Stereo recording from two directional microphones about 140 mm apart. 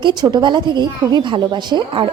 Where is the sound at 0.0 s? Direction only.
30° right (ahead or behind).